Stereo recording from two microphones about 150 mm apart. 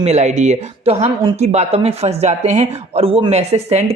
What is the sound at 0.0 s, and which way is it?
Speech, 50° right (ahead or behind).